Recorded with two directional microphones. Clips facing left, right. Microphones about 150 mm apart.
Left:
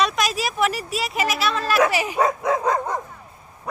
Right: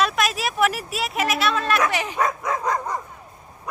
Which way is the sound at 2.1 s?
30° left (ahead or behind).